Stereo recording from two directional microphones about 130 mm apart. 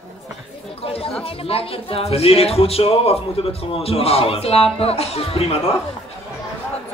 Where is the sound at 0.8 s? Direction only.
50° left (ahead or behind).